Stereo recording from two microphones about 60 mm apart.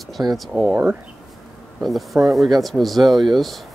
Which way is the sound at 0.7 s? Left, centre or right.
Right.